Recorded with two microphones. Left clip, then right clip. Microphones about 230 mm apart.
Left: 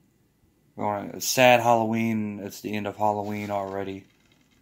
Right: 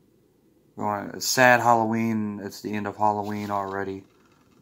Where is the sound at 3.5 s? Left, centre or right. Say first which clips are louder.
Right 1 dB; centre.